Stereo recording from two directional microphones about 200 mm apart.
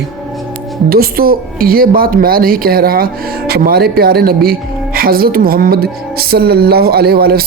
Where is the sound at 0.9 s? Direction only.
50° right (ahead or behind).